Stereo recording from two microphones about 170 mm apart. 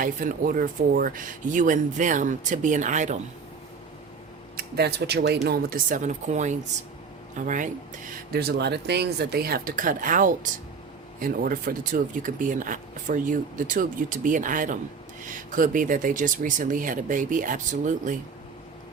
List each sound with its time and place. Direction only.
0.0 s speech: 55° right (ahead or behind)
4.5 s speech: 70° right (ahead or behind)
5.5 s speech: 50° right (ahead or behind)